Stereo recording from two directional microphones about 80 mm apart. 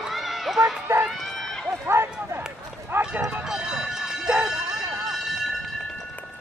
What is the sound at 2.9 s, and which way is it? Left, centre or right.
Clip-clop, right.